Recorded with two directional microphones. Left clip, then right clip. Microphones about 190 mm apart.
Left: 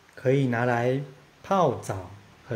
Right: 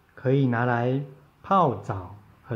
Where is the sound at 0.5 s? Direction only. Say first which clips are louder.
Even; 15° left (ahead or behind).